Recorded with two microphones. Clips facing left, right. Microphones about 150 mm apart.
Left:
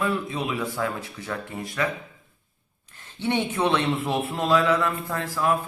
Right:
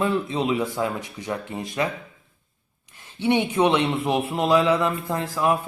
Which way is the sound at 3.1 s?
15° right (ahead or behind).